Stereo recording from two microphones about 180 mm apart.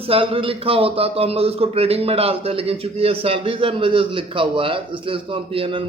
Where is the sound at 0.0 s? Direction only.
30° right (ahead or behind).